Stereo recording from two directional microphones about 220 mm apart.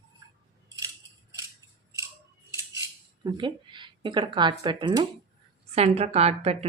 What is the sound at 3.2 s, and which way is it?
A woman's voice, 20° right (ahead or behind).